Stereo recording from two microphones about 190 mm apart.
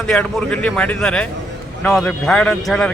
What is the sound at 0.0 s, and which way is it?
A man's voice, 5° left (ahead or behind).